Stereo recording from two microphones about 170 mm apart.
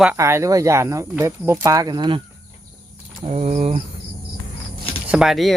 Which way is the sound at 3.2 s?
40° right (ahead or behind).